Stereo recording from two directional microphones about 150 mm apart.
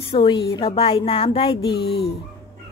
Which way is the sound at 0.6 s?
40° left (ahead or behind).